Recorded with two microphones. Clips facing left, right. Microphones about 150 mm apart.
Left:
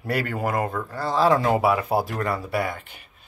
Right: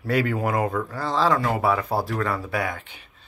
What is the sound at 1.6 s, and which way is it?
Speech, 5° left (ahead or behind).